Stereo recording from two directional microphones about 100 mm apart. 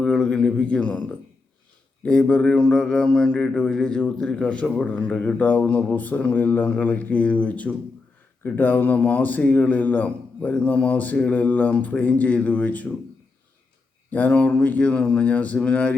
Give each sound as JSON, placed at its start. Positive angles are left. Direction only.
{"t": 0.0, "sound": "a man's voice", "side_deg": 5}
{"t": 2.0, "sound": "mantra", "side_deg": 10}
{"t": 14.1, "sound": "mantra", "side_deg": 15}